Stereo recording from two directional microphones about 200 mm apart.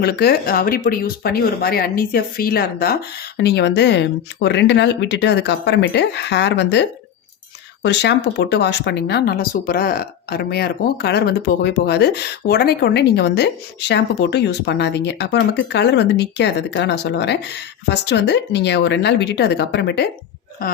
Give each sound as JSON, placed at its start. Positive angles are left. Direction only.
{"t": 0.0, "sound": "speech", "side_deg": 50}